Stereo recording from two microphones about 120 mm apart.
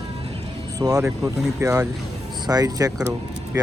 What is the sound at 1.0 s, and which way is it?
Speech, 25° right (ahead or behind).